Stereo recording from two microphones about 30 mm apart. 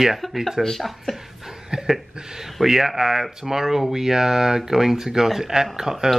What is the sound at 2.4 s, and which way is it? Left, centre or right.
Speech, centre.